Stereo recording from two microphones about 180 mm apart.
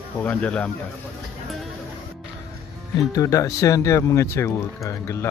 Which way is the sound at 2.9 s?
20° left (ahead or behind).